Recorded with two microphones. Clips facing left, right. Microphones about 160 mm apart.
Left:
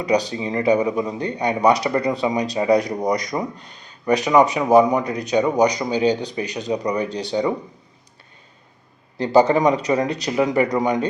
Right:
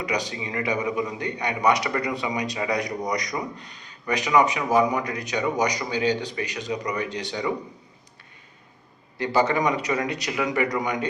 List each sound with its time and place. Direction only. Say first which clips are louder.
0.0 s a man's voice: left 8 dB; 35° left (ahead or behind)
9.1 s a man's voice: left 7 dB; 35° left (ahead or behind)